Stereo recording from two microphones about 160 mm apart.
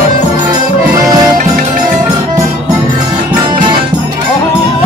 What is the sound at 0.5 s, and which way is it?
Music, 20° right (ahead or behind).